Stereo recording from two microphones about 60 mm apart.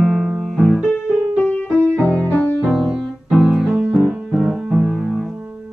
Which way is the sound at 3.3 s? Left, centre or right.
Centre.